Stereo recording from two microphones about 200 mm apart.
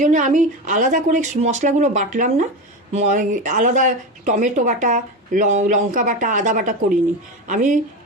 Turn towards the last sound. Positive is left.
turn(degrees=-40)  # may be behind; listen again after turning